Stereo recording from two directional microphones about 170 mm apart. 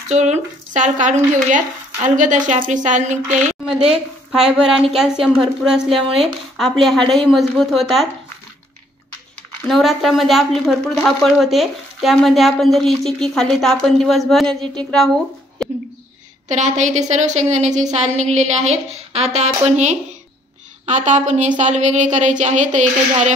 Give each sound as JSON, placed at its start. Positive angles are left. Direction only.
{"t": 0.1, "sound": "stir", "side_deg": -45}
{"t": 3.3, "sound": "a woman's voice", "side_deg": -45}
{"t": 3.7, "sound": "a woman's voice", "side_deg": -5}
{"t": 9.7, "sound": "a woman's voice", "side_deg": 0}
{"t": 15.6, "sound": "a sound", "side_deg": 0}
{"t": 16.4, "sound": "stir", "side_deg": -45}